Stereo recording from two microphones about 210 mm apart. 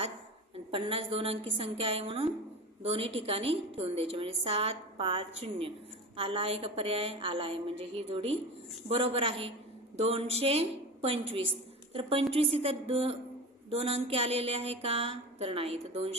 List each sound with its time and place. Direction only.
0.7 s a woman's voice: 25° right (ahead or behind)